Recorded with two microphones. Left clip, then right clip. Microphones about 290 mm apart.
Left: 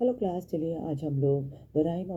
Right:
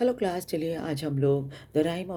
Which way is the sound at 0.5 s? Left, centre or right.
Right.